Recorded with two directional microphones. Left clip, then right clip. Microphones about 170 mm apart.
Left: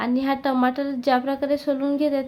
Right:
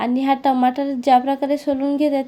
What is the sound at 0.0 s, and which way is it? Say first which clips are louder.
A woman's voice: right 5 dB; 20° right (ahead or behind).